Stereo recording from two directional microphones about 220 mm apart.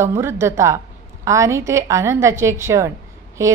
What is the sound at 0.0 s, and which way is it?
A woman's voice, 10° right (ahead or behind).